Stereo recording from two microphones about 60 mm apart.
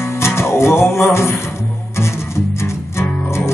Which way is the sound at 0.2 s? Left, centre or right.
Left.